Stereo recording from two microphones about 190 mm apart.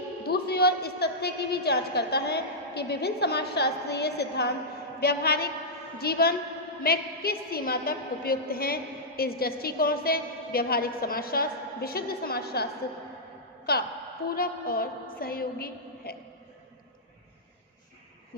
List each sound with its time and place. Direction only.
0.3 s a woman's voice: 55° left (ahead or behind)
13.7 s a woman's voice: 55° left (ahead or behind)